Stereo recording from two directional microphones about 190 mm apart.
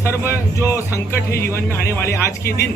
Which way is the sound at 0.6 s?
15° left (ahead or behind).